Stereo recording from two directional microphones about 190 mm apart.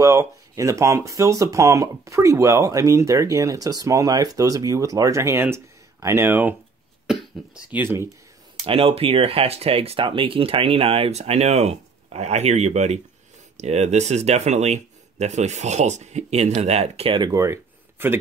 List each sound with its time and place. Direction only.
0.0 s speech: 15° right (ahead or behind)
7.1 s cough: 5° right (ahead or behind)
8.6 s speech: 30° right (ahead or behind); by 18.1 s 15° right (ahead or behind)